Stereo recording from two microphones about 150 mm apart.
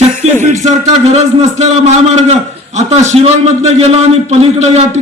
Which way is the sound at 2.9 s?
45° right (ahead or behind).